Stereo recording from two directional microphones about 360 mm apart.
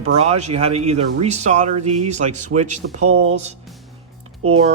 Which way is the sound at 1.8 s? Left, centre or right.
Right.